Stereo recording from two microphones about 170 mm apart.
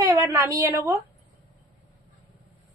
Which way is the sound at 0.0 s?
20° right (ahead or behind).